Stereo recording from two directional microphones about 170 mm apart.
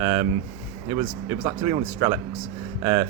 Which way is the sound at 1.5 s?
25° right (ahead or behind).